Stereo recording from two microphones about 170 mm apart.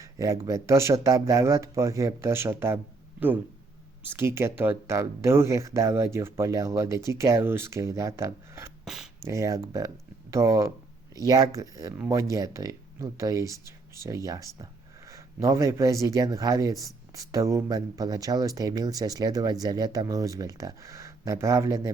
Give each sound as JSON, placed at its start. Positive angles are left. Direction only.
{"t": 0.0, "sound": "a sound", "side_deg": -20}
{"t": 0.4, "sound": "speech", "side_deg": -20}
{"t": 8.8, "sound": "speech", "side_deg": 0}
{"t": 9.2, "sound": "speech", "side_deg": -20}